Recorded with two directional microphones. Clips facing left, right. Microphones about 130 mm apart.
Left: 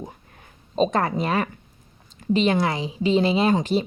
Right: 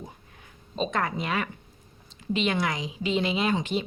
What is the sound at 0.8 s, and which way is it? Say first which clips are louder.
Speech: left 7 dB; 35° left (ahead or behind).